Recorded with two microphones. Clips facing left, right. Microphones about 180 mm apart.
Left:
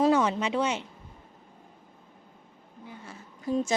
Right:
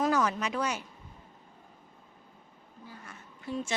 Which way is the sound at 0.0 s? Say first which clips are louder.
Left 5 dB; 25° left (ahead or behind).